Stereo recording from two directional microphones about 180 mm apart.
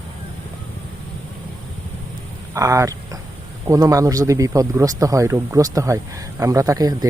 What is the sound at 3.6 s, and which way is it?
Speech, 20° right (ahead or behind).